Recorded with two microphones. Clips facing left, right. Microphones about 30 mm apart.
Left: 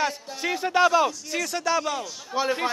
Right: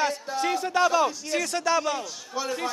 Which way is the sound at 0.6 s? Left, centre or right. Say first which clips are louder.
Left 4 dB; left.